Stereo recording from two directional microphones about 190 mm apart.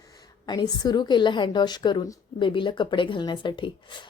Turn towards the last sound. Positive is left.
turn(degrees=25)  # may be behind; listen again after turning